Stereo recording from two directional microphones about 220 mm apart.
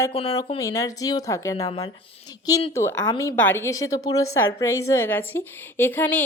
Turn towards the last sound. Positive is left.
turn(degrees=10)  # may be behind; listen again after turning